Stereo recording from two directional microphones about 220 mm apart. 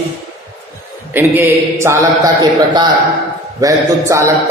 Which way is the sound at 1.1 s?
10° right (ahead or behind).